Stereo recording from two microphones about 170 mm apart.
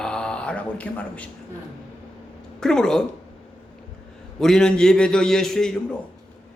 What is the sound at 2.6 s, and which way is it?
Speech, 5° left (ahead or behind).